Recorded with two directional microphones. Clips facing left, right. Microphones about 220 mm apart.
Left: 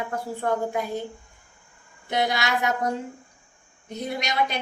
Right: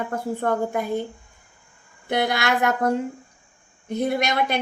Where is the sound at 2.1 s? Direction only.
55° right (ahead or behind).